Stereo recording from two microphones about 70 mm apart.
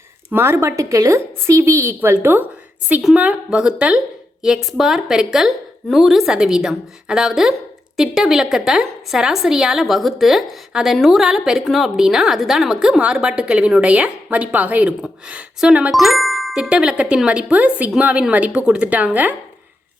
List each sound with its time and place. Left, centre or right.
0.3 s a woman's voice: right
3.2 s a woman's voice: centre
9.8 s a woman's voice: centre
15.9 s speech: centre
16.6 s a woman's voice: centre